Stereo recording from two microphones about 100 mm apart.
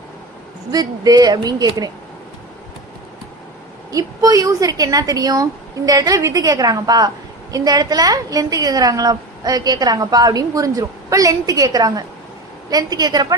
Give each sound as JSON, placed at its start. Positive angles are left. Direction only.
{"t": 0.7, "sound": "a woman's voice", "side_deg": -40}
{"t": 3.9, "sound": "a woman's voice", "side_deg": -35}